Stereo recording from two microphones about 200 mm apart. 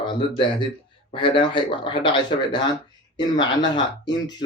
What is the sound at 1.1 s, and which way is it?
Speech, 25° left (ahead or behind).